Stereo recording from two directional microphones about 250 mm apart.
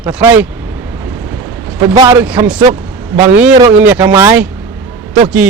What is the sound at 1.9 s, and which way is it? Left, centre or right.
Speech, centre.